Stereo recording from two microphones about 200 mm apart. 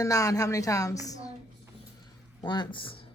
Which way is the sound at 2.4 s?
20° left (ahead or behind).